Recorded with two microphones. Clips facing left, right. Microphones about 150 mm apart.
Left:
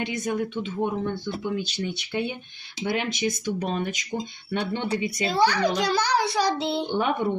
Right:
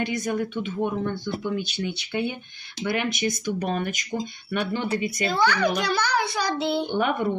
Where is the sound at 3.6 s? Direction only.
60° right (ahead or behind).